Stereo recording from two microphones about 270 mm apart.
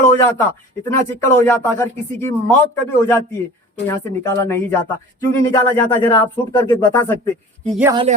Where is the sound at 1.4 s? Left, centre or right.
Centre.